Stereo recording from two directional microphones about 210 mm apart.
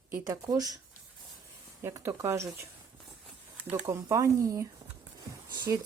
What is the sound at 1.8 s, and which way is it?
Speech, 15° right (ahead or behind).